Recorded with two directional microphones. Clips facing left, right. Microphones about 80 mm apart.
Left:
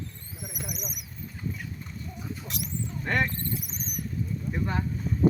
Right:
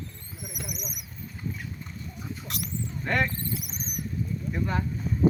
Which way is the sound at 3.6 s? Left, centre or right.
Centre.